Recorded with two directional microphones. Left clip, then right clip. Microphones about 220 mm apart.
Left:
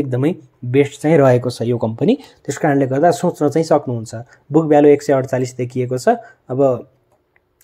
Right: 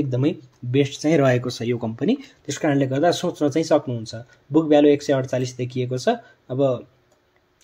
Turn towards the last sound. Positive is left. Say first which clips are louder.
# left 6 dB
turn(degrees=25)  # may be behind; listen again after turning